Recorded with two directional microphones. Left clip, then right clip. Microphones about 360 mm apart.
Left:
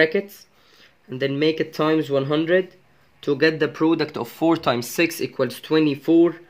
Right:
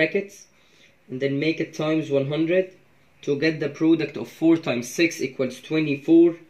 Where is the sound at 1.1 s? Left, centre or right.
Centre.